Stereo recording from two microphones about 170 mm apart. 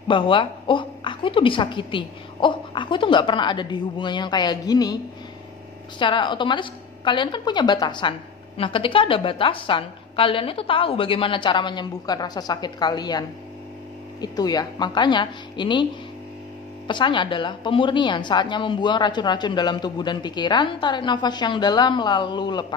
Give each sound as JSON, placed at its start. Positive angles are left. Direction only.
{"t": 0.1, "sound": "a woman's voice", "side_deg": 30}
{"t": 5.9, "sound": "a woman's voice", "side_deg": 30}
{"t": 14.2, "sound": "a woman's voice", "side_deg": 25}